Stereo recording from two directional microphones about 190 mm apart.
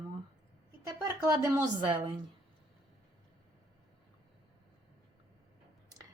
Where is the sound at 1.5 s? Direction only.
25° right (ahead or behind).